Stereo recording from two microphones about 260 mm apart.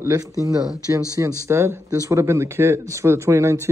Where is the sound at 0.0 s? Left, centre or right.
Centre.